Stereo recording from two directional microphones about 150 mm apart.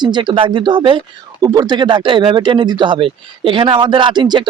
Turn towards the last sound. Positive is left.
turn(degrees=-30)  # may be behind; listen again after turning